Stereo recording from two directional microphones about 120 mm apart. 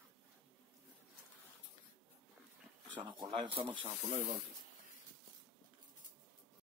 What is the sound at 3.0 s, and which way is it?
Speech, 40° right (ahead or behind).